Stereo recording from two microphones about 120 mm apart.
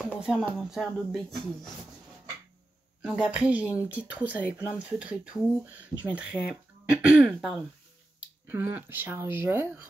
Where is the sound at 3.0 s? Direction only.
5° right (ahead or behind).